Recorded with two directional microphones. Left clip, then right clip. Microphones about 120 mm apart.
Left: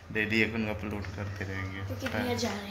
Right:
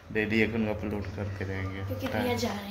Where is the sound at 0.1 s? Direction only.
15° right (ahead or behind).